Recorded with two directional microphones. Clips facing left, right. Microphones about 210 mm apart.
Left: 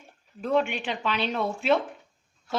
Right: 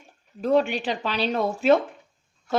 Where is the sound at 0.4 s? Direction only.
35° right (ahead or behind).